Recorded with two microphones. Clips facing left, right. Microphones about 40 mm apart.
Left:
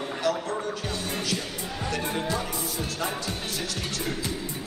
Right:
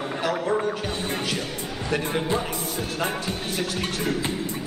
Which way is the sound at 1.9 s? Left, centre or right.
Right.